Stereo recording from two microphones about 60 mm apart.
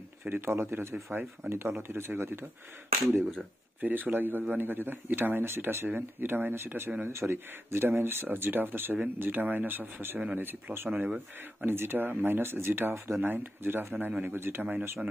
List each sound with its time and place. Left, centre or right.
0.2 s speech: right